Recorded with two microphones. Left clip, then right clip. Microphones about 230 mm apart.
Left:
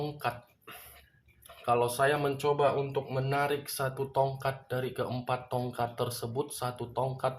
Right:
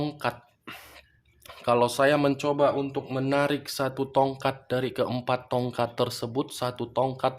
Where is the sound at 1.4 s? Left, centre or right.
Right.